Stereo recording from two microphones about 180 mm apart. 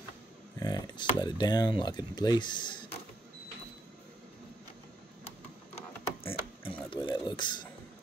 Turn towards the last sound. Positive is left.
turn(degrees=25)  # may be behind; listen again after turning